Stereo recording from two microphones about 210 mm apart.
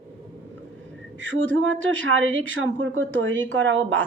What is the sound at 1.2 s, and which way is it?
Speech, 65° right (ahead or behind).